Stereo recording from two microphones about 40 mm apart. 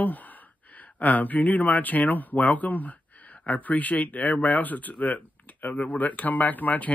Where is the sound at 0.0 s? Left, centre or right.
Left.